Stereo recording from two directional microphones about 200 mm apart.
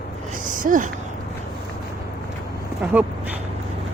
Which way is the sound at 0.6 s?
40° right (ahead or behind).